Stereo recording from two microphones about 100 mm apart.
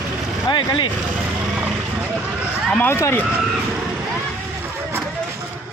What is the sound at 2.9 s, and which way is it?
Speech, 25° left (ahead or behind).